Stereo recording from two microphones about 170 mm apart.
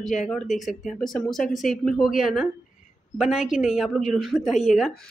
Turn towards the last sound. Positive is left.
turn(degrees=0)  # may be behind; listen again after turning